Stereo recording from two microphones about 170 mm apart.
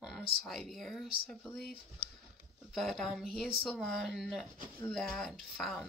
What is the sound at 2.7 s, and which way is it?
Speech, centre (ahead or behind).